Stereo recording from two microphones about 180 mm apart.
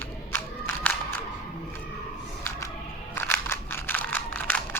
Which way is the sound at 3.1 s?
10° left (ahead or behind).